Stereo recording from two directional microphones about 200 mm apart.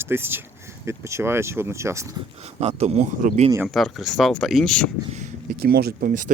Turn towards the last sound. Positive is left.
turn(degrees=-45)  # may be behind; listen again after turning